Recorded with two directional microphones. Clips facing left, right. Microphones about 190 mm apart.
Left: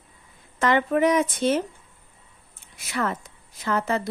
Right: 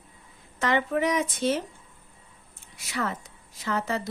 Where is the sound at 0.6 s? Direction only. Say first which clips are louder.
Left 4 dB; 55° left (ahead or behind).